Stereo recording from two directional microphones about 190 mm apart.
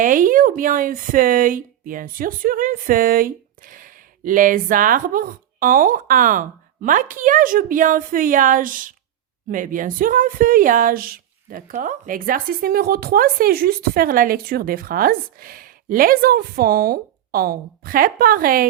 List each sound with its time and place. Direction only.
0.0 s speech: 45° right (ahead or behind)